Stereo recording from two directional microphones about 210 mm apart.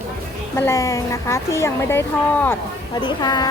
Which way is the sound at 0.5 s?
10° left (ahead or behind).